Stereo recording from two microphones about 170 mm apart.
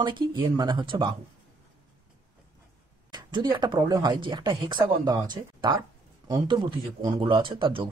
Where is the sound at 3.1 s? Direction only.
25° right (ahead or behind).